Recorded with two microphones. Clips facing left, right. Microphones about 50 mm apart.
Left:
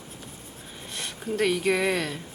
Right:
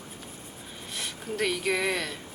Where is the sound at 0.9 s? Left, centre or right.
Centre.